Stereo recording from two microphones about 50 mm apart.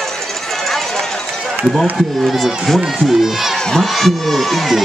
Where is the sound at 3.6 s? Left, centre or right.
Centre.